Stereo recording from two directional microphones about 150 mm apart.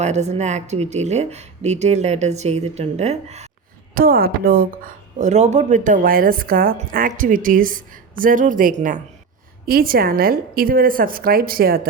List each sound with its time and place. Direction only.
0.0 s speech: 50° right (ahead or behind)
3.9 s a woman's voice: 75° right (ahead or behind); by 9.0 s 60° right (ahead or behind)
9.6 s speech: 80° right